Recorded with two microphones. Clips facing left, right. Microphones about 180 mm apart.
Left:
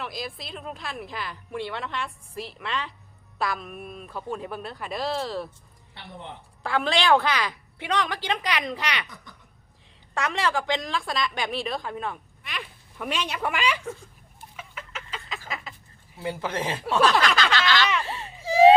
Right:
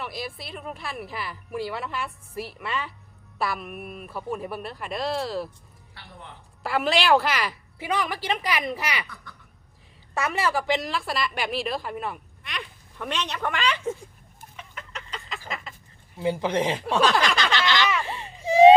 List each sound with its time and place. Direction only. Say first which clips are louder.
0.0 s a woman's voice: even; centre (ahead or behind)
6.6 s a woman's voice: right 1 dB; 5° right (ahead or behind)
10.2 s a woman's voice: right 1 dB; 5° right (ahead or behind)
14.5 s chicken: left 1 dB; 5° left (ahead or behind)
15.4 s a sound: right 2 dB; 5° left (ahead or behind)
16.1 s speech: right 5 dB; 15° right (ahead or behind)
17.2 s a sound: left 1 dB; 20° right (ahead or behind)
18.0 s baby cry: even; 15° right (ahead or behind)
18.4 s a sound: right 2 dB; 20° right (ahead or behind)